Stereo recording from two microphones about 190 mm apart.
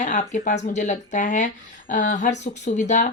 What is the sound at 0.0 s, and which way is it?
A woman's voice, 40° left (ahead or behind).